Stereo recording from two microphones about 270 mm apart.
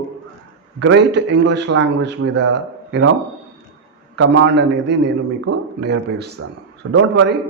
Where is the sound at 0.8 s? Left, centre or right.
Right.